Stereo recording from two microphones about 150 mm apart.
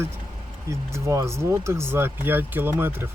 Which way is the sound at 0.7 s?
20° right (ahead or behind).